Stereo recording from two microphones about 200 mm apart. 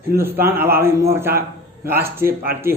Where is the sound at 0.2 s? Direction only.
10° right (ahead or behind).